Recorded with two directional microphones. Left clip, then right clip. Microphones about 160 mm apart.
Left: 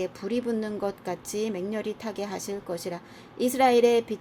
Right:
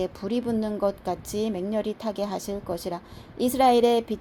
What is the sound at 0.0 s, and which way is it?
Speech, 30° right (ahead or behind).